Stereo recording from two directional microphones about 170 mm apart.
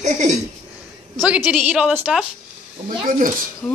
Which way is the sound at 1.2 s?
5° right (ahead or behind).